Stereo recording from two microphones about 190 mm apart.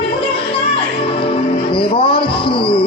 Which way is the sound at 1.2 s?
25° left (ahead or behind).